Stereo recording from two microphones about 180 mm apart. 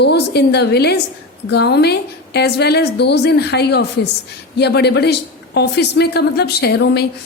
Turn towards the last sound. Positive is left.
turn(degrees=65)  # may be behind; listen again after turning